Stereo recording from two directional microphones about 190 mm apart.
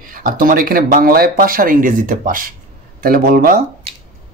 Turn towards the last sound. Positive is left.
turn(degrees=-50)  # may be behind; listen again after turning